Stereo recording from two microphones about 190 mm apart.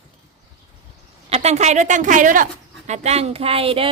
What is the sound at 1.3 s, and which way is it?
A woman's voice, 35° right (ahead or behind).